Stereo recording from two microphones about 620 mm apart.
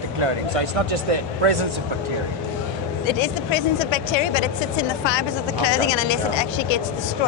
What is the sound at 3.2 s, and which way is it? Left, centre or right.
A woman's voice, left.